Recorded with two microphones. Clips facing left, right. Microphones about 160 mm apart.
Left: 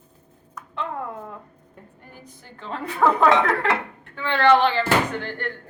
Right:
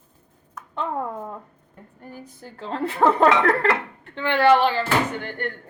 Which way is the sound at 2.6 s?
30° right (ahead or behind).